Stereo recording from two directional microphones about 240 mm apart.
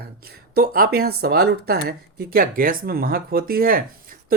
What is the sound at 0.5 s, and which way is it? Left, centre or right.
Speech, right.